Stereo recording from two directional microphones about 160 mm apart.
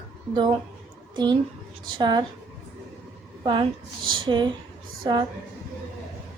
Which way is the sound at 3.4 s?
30° right (ahead or behind).